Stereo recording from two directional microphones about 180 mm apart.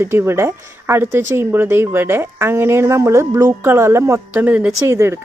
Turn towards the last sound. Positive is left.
turn(degrees=-15)  # may be behind; listen again after turning